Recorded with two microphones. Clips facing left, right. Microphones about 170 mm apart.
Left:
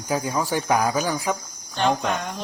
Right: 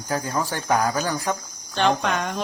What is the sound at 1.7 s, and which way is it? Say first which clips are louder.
Speech: right 1 dB; 75° right (ahead or behind).